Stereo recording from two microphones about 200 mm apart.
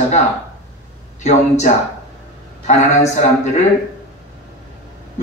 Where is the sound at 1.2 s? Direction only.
35° left (ahead or behind).